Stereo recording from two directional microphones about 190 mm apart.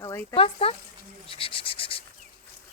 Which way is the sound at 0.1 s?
15° left (ahead or behind).